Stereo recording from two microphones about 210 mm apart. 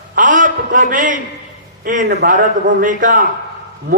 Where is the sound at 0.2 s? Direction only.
40° right (ahead or behind).